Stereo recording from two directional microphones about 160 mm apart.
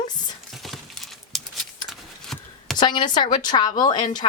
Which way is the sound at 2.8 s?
30° left (ahead or behind).